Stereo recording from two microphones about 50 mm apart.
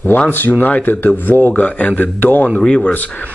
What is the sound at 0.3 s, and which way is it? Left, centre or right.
Speech, left.